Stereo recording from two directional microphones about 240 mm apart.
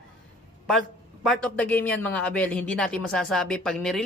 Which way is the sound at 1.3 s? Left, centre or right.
Centre.